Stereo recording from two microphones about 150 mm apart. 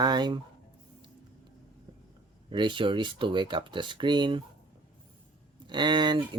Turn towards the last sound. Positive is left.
turn(degrees=-30)  # may be behind; listen again after turning